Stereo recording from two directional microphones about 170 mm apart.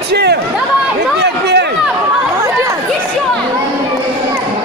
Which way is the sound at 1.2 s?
80° right.